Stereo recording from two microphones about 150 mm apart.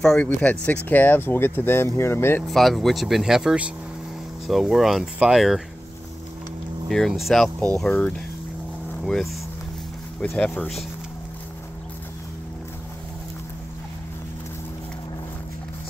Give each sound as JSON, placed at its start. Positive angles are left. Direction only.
{"t": 0.0, "sound": "speech", "side_deg": 5}
{"t": 2.4, "sound": "speech", "side_deg": 0}
{"t": 6.9, "sound": "speech", "side_deg": 0}